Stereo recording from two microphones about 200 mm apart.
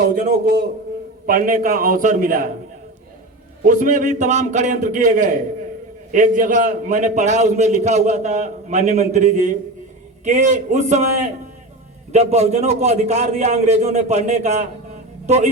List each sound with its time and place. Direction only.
0.0 s a man's voice: 50° right (ahead or behind)
3.6 s a man's voice: 40° right (ahead or behind)